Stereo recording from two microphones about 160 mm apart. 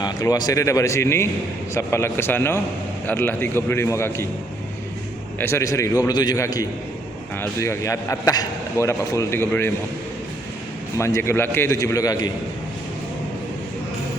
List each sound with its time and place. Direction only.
0.0 s a man's voice: 25° left (ahead or behind)
5.4 s a man's voice: 15° left (ahead or behind)
10.9 s a man's voice: 15° left (ahead or behind)